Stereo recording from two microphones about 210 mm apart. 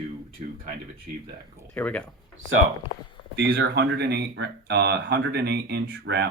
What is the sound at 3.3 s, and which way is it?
Speech, 55° right (ahead or behind).